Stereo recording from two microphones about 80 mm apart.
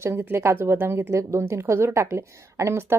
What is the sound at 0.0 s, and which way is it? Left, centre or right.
Speech, right.